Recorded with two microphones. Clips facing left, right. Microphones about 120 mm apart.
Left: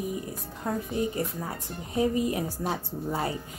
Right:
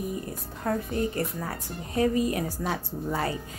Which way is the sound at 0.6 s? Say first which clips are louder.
Right 1 dB; 15° left (ahead or behind).